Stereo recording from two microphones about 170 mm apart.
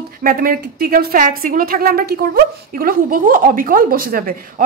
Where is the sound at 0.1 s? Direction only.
60° right (ahead or behind).